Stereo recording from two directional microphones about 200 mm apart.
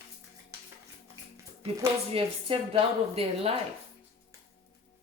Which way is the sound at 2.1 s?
30° right (ahead or behind).